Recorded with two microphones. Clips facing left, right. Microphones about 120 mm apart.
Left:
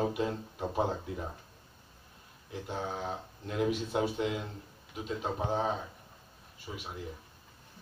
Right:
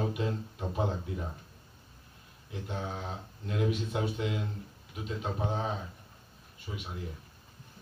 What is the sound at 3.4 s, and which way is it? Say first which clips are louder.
Speech: even; 30° left (ahead or behind).